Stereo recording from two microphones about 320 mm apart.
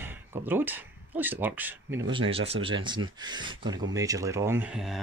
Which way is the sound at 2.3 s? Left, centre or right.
Centre.